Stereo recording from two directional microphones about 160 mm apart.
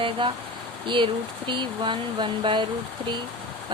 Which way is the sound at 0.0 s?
30° right (ahead or behind).